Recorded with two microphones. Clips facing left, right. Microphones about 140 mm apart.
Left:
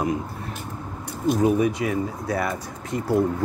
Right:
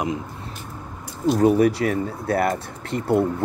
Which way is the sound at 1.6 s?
65° right (ahead or behind).